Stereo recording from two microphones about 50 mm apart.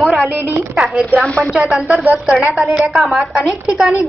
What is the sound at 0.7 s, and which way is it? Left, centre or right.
A woman's voice, centre.